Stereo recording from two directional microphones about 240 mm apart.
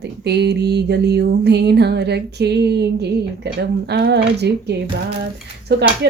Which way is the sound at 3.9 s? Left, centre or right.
Right.